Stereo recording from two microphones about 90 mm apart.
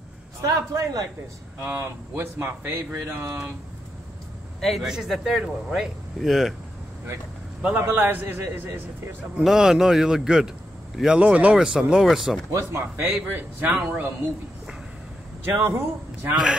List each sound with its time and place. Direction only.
0.4 s a man's voice: 40° right (ahead or behind)
1.6 s a man's voice: 25° right (ahead or behind)
4.6 s a man's voice: centre (ahead or behind)
7.8 s speech: 25° right (ahead or behind)
9.4 s a man's voice: 5° right (ahead or behind)
12.4 s speech: 30° right (ahead or behind)
13.7 s speech: 15° right (ahead or behind)
15.4 s speech: 25° right (ahead or behind)